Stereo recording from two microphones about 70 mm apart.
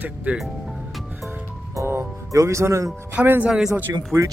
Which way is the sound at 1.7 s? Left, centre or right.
Right.